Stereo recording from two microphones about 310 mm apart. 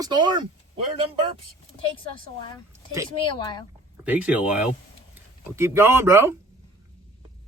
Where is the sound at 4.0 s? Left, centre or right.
Centre.